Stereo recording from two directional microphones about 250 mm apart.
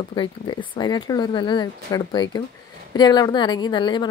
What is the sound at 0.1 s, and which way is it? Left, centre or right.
A woman's voice, centre.